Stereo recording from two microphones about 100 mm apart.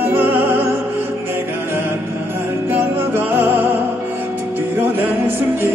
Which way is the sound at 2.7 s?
20° right (ahead or behind).